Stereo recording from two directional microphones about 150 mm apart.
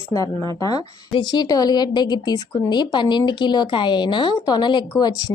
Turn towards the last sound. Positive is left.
turn(degrees=25)  # may be behind; listen again after turning